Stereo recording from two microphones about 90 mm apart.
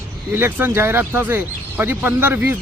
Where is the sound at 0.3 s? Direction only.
20° right (ahead or behind).